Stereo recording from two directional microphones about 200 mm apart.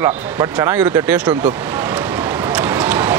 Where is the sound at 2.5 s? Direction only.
10° right (ahead or behind).